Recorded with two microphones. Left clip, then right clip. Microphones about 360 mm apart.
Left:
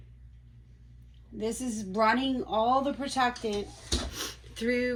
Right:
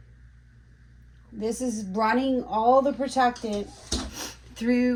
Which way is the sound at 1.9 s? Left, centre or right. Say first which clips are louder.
Right 1 dB; centre.